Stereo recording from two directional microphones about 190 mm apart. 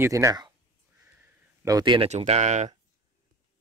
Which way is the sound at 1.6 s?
20° right (ahead or behind).